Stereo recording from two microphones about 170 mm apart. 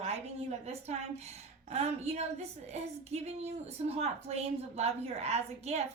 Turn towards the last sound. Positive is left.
turn(degrees=-40)  # may be behind; listen again after turning